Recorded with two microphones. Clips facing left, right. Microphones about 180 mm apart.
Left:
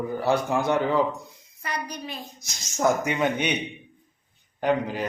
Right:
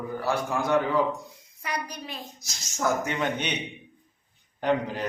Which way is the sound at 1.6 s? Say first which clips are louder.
Left 1 dB; 10° right (ahead or behind).